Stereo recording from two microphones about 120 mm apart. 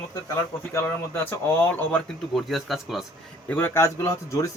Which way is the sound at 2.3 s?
Centre (ahead or behind).